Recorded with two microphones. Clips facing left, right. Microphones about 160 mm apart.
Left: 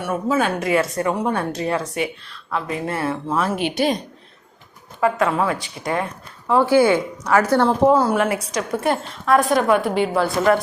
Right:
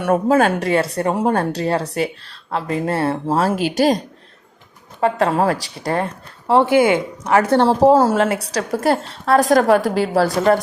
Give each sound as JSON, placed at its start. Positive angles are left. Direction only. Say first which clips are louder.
{"t": 0.0, "sound": "speech", "louder": "right 6 dB", "side_deg": -55}
{"t": 0.6, "sound": "speech", "louder": "right 1 dB", "side_deg": -30}
{"t": 1.1, "sound": "speech", "louder": "right 4 dB", "side_deg": -45}
{"t": 6.5, "sound": "speech", "louder": "right 1 dB", "side_deg": -20}
{"t": 7.8, "sound": "speech", "louder": "right 5 dB", "side_deg": -40}
{"t": 8.1, "sound": "speech", "louder": "right 2 dB", "side_deg": -25}